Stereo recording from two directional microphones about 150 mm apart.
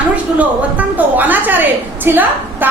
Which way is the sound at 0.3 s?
10° right (ahead or behind).